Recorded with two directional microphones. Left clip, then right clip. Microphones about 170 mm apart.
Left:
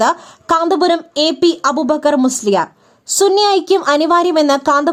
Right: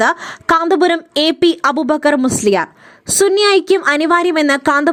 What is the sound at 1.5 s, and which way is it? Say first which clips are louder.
Speech: even; 90° right.